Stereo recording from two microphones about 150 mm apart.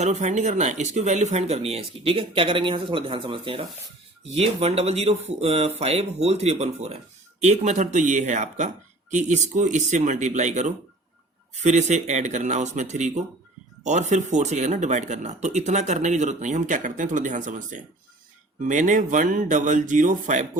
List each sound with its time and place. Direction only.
0.0 s speech: 50° right (ahead or behind)